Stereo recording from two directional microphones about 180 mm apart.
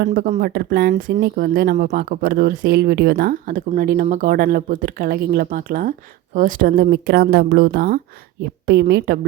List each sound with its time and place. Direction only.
0.0 s a woman's voice: 55° right (ahead or behind)